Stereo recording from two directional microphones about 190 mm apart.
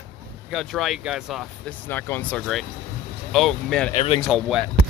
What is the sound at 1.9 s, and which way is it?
Speech, 10° left (ahead or behind).